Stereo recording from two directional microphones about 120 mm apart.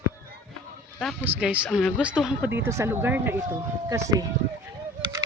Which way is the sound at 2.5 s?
20° right (ahead or behind).